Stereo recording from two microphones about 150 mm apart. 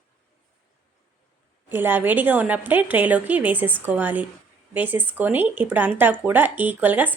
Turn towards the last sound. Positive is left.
turn(degrees=-10)  # may be behind; listen again after turning